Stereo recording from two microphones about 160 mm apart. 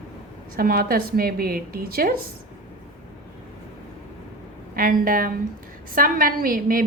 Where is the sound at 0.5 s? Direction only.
65° right (ahead or behind).